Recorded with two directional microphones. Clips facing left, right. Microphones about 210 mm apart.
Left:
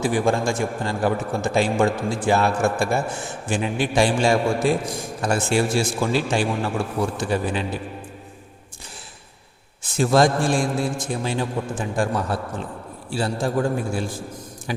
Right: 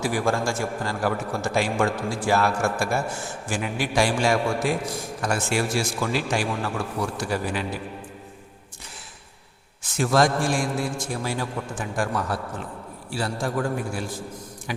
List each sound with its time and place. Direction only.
0.0 s a man's voice: 20° left (ahead or behind)
10.0 s a man's voice: 25° left (ahead or behind)